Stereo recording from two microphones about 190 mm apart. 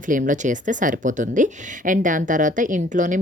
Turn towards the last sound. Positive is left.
turn(degrees=-40)  # may be behind; listen again after turning